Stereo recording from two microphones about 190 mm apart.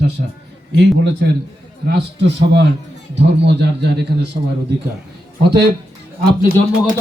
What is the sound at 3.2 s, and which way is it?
Speech, 65° right (ahead or behind).